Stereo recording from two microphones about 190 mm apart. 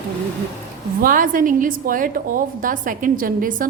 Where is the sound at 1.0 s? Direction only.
45° right (ahead or behind).